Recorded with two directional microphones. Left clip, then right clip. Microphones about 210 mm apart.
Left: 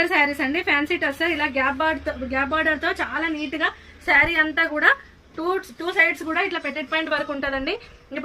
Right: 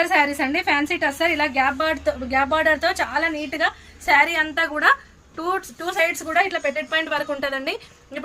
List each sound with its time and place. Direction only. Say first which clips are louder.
0.0 s a woman's voice: right 1 dB; 50° right (ahead or behind)
4.0 s a woman's voice: even; 35° right (ahead or behind); by 5.9 s 15° right (ahead or behind)
6.3 s a woman's voice: right 4 dB; 55° right (ahead or behind)